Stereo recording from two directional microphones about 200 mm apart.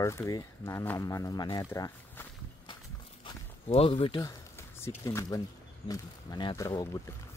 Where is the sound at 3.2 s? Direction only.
25° left (ahead or behind).